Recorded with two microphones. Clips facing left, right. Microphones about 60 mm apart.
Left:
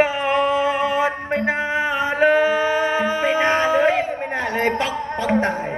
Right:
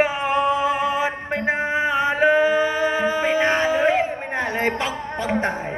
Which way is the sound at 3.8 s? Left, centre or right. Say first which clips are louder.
Left 1 dB; right.